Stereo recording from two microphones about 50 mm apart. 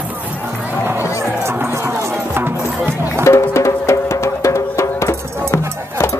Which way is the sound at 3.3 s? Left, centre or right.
Left.